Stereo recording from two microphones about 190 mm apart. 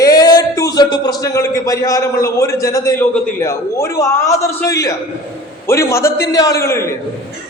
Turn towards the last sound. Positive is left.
turn(degrees=15)  # may be behind; listen again after turning